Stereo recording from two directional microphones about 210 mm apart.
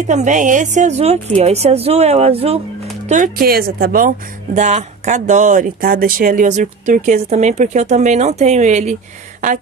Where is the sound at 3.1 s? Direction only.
40° right (ahead or behind).